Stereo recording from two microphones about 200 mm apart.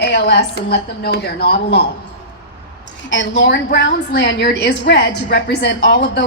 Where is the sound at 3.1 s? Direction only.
60° left (ahead or behind).